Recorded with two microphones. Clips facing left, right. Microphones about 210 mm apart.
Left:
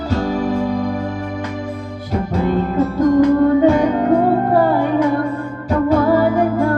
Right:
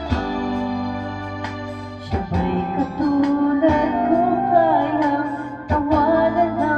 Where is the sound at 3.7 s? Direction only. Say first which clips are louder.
Left 3 dB; 40° left (ahead or behind).